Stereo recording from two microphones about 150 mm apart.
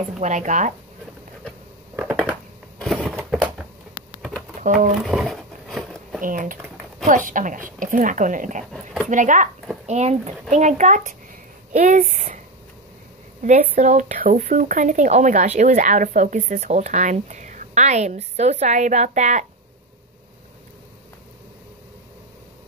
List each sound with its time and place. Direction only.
0.2 s speech: 55° right (ahead or behind)
2.0 s a sound: 15° right (ahead or behind)
3.0 s a sound: centre (ahead or behind)
4.7 s speech: 5° right (ahead or behind)
6.2 s speech: 65° right (ahead or behind)
13.6 s speech: 55° right (ahead or behind)